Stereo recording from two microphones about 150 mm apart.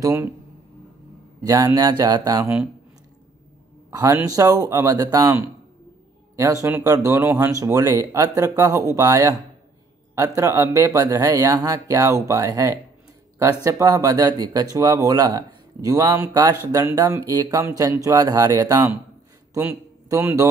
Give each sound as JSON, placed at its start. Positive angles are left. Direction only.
{"t": 0.0, "sound": "speech", "side_deg": -15}
{"t": 1.4, "sound": "speech", "side_deg": -25}
{"t": 3.9, "sound": "speech", "side_deg": -20}